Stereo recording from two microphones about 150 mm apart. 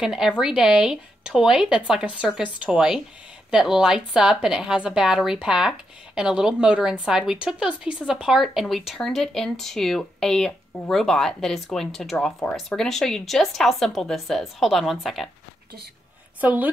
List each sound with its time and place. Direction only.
0.0 s speech: 5° right (ahead or behind)
16.3 s a woman's voice: 10° right (ahead or behind)